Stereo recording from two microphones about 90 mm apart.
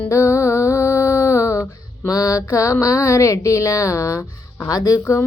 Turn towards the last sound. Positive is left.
turn(degrees=40)  # may be behind; listen again after turning